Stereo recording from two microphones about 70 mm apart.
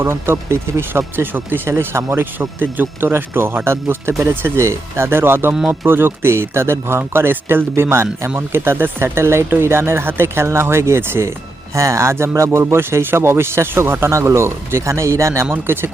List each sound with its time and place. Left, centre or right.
0.0 s speech: right
15.5 s speech: right